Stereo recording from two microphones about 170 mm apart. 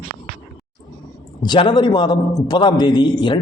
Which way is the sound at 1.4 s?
25° left (ahead or behind).